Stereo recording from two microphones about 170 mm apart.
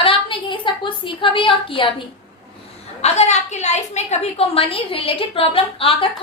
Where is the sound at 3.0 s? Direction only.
40° left (ahead or behind).